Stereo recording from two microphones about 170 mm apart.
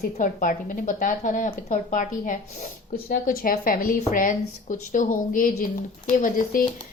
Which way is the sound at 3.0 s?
60° left (ahead or behind).